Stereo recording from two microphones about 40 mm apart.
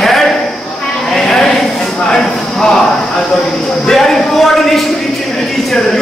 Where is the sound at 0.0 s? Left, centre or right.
Centre.